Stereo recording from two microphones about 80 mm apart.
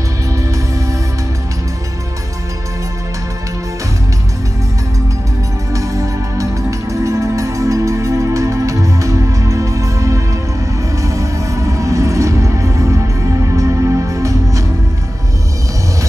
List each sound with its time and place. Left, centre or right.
5.7 s music: right